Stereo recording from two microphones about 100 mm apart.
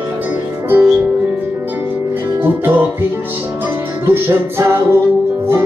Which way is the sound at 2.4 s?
20° right (ahead or behind).